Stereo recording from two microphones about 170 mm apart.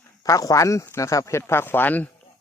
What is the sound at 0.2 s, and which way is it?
Speech, 20° left (ahead or behind).